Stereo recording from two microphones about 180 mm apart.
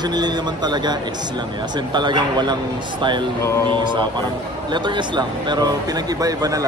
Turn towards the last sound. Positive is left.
turn(degrees=-20)  # may be behind; listen again after turning